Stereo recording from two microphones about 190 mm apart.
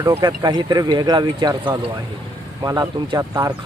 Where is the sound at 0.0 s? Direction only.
20° right (ahead or behind).